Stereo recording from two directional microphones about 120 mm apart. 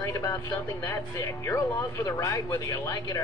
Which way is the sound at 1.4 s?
25° left (ahead or behind).